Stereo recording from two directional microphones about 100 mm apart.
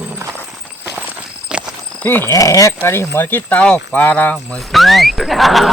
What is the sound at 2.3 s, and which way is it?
Speech, 35° left (ahead or behind).